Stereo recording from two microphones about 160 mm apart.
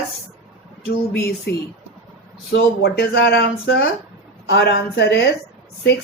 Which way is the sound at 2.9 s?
90° left.